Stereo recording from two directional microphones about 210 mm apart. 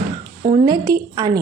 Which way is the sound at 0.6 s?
20° right (ahead or behind).